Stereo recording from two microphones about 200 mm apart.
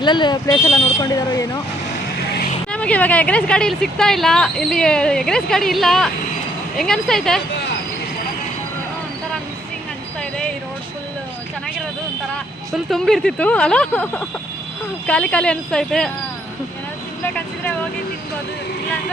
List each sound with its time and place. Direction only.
0.0 s speech: 20° left (ahead or behind)
2.7 s speech: 5° left (ahead or behind)
12.7 s speech: centre (ahead or behind)
17.3 s speech: 5° left (ahead or behind)